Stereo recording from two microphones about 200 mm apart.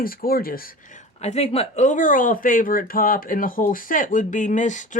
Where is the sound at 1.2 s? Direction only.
35° left (ahead or behind).